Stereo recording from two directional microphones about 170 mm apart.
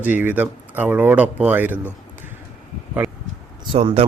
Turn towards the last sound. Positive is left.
turn(degrees=-35)  # may be behind; listen again after turning